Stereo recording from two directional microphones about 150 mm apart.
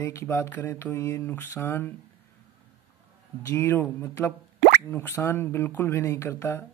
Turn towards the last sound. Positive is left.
turn(degrees=15)  # may be behind; listen again after turning